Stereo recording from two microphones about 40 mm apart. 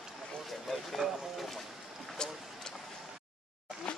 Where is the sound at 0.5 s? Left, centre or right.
Centre.